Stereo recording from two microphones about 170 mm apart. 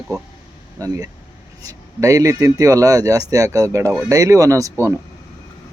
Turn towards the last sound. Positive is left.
turn(degrees=-15)  # may be behind; listen again after turning